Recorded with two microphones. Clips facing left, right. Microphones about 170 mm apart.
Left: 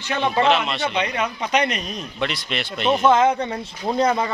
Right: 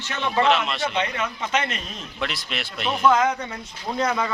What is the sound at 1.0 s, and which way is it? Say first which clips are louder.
A man's voice: left 2 dB; 15° left (ahead or behind).